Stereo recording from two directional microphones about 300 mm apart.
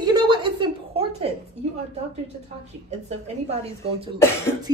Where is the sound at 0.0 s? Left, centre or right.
Centre.